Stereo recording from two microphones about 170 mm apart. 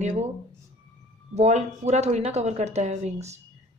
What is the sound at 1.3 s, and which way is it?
Speech, 40° right (ahead or behind).